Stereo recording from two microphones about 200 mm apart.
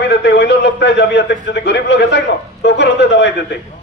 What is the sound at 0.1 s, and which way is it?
A man's voice, 55° left (ahead or behind).